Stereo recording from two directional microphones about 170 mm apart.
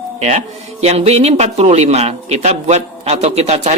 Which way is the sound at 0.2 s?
40° right (ahead or behind).